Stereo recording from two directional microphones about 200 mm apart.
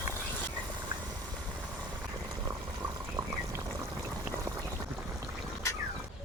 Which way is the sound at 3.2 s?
20° right (ahead or behind).